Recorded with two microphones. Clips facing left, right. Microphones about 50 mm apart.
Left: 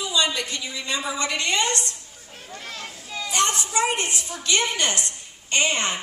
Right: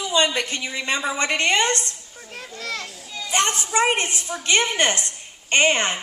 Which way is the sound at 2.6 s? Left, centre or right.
Right.